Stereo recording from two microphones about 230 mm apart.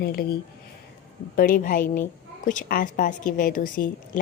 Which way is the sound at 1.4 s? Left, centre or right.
Left.